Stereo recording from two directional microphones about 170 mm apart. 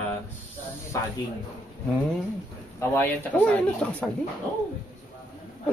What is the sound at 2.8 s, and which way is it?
Speech, 10° left (ahead or behind).